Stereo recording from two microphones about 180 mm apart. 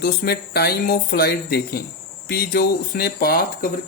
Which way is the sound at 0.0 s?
65° left (ahead or behind).